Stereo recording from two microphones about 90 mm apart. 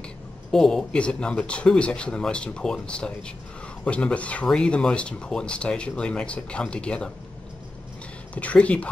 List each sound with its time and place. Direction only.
0.5 s speech: 5° left (ahead or behind)
8.4 s speech: 15° left (ahead or behind)